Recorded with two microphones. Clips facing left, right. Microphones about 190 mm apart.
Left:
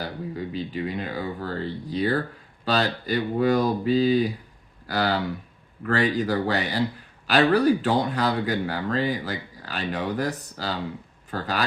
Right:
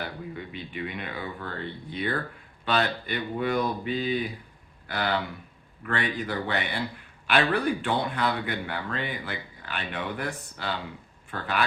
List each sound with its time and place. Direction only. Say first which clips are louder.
0.0 s speech: left 4 dB; 35° left (ahead or behind)